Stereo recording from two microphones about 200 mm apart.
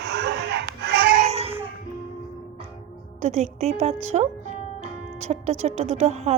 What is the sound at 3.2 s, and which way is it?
A woman's voice, 30° right (ahead or behind).